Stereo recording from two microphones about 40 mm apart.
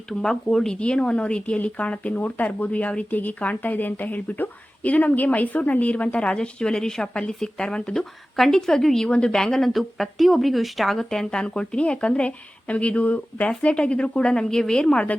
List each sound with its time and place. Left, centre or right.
0.1 s a woman's voice: centre
0.7 s speech: left
6.2 s speech: left
7.9 s a woman's voice: centre
9.0 s speech: left
9.3 s speech: centre
10.9 s speech: centre